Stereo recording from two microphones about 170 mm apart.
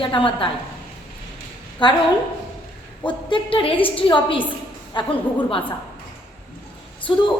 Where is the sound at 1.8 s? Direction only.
25° left (ahead or behind).